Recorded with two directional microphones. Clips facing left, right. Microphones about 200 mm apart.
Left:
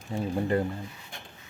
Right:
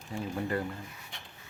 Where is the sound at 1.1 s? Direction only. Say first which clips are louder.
Left 4 dB; 45° left (ahead or behind).